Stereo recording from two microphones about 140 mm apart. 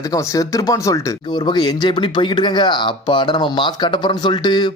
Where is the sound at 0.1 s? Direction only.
25° left (ahead or behind).